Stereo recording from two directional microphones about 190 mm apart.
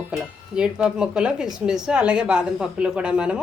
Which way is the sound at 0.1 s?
10° right (ahead or behind).